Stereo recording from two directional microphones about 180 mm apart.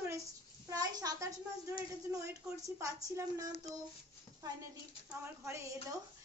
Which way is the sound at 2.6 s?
20° right (ahead or behind).